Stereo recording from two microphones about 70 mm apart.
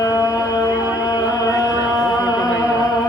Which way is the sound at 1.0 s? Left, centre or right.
Left.